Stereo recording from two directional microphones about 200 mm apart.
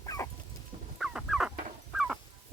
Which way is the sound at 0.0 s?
15° left (ahead or behind).